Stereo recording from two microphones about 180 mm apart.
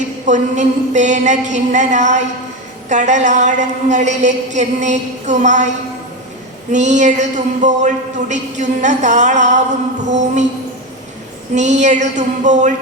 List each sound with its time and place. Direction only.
0.3 s a man's voice: 40° right (ahead or behind)
6.7 s a man's voice: 40° right (ahead or behind)
11.5 s a man's voice: 40° right (ahead or behind)